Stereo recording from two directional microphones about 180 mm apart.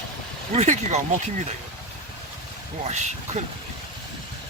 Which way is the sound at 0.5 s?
40° right (ahead or behind).